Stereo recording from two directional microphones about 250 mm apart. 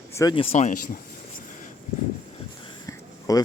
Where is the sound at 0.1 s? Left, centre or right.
Centre.